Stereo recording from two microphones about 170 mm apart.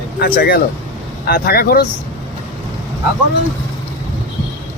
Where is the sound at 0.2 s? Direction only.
65° left (ahead or behind).